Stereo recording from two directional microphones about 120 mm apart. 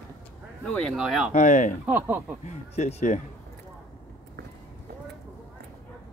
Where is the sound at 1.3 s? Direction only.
90° left.